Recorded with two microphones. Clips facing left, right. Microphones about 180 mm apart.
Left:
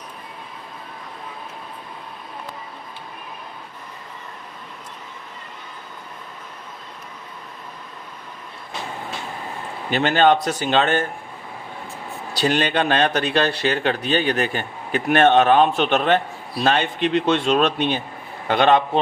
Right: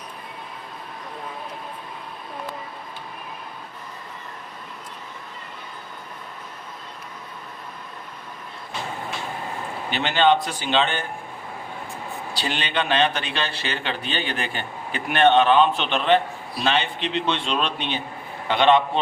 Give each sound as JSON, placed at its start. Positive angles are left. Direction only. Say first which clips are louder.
{"t": 9.9, "sound": "speech", "louder": "left 3 dB", "side_deg": 45}
{"t": 12.4, "sound": "speech", "louder": "left 7 dB", "side_deg": 45}